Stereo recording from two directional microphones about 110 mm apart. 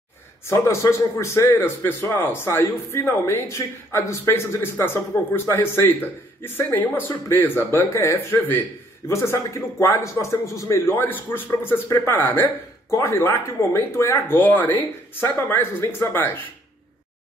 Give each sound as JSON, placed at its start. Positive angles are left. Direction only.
{"t": 0.5, "sound": "a man's voice", "side_deg": 25}